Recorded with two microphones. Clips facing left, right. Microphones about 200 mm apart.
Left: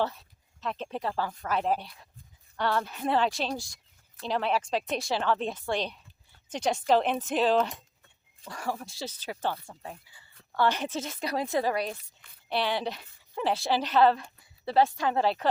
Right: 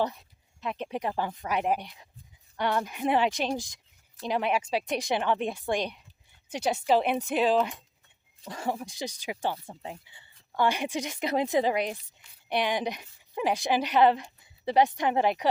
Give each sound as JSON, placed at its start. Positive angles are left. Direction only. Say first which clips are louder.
{"t": 0.0, "sound": "speech", "louder": "right 1 dB", "side_deg": -15}
{"t": 8.4, "sound": "a woman's voice", "louder": "right 2 dB", "side_deg": -20}